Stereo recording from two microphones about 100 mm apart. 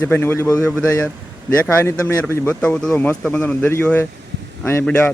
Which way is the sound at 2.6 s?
10° left (ahead or behind).